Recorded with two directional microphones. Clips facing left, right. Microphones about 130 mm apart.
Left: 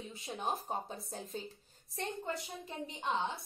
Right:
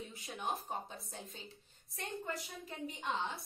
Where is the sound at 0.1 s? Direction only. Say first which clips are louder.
Left 4 dB; 30° left (ahead or behind).